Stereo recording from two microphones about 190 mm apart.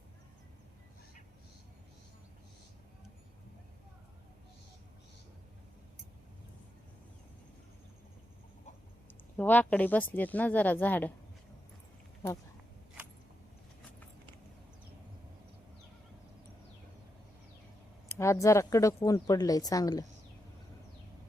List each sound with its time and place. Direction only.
9.4 s speech: 10° left (ahead or behind)
18.1 s a woman's voice: 15° left (ahead or behind)